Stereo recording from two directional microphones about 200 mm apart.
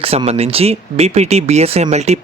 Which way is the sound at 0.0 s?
30° right (ahead or behind).